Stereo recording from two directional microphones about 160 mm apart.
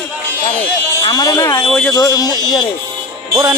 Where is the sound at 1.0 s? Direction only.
25° left (ahead or behind).